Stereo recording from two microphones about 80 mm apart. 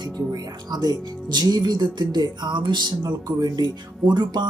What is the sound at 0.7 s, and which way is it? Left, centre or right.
Speech, right.